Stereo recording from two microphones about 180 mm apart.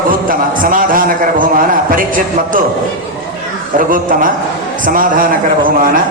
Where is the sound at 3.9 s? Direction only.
50° right (ahead or behind).